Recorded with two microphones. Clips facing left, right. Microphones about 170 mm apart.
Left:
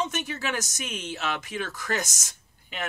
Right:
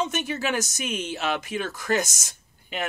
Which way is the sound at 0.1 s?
10° right (ahead or behind).